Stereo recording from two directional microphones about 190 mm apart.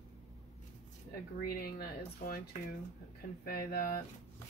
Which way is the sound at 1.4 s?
50° left (ahead or behind).